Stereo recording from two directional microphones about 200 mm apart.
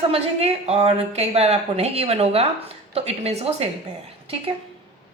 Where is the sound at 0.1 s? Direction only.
30° right (ahead or behind).